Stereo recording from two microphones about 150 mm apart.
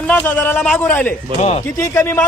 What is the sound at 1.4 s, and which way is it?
Speech, 50° left (ahead or behind).